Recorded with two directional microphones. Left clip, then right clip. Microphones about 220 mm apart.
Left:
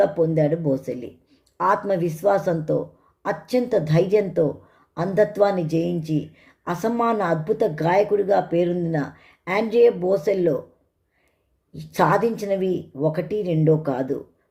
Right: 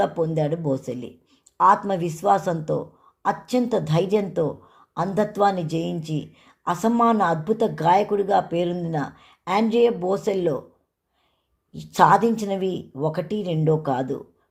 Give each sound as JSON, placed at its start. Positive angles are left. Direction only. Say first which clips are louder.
{"t": 0.0, "sound": "speech", "louder": "left 4 dB", "side_deg": -25}
{"t": 11.9, "sound": "speech", "louder": "right 3 dB", "side_deg": -25}